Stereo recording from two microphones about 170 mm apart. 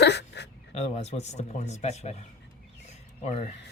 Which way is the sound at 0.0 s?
85° left.